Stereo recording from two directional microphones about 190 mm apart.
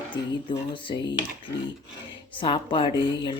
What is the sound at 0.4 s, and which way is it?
Speech, 25° left (ahead or behind).